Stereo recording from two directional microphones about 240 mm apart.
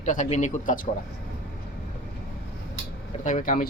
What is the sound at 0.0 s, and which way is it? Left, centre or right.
Speech, left.